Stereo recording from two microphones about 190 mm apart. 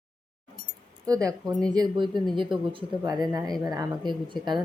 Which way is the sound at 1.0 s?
20° right (ahead or behind).